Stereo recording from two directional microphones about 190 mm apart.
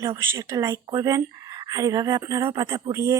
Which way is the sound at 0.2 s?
15° right (ahead or behind).